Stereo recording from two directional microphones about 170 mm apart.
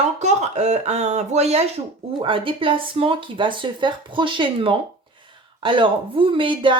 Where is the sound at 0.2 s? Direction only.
40° right (ahead or behind).